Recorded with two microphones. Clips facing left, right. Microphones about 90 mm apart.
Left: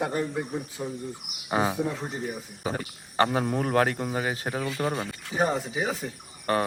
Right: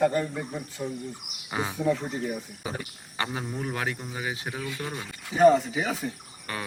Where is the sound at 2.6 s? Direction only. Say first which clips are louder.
Left 7 dB; 40° left (ahead or behind).